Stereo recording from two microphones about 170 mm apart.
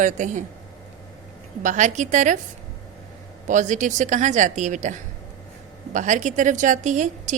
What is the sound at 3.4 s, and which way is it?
A woman's voice, 45° right (ahead or behind).